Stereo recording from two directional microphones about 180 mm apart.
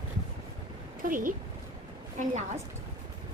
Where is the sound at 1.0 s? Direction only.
50° right (ahead or behind).